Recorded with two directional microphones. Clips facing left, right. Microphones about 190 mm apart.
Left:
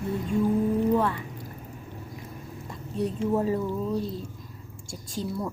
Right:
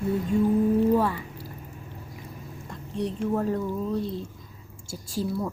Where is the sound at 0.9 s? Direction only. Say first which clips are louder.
Right 1 dB; 10° right (ahead or behind).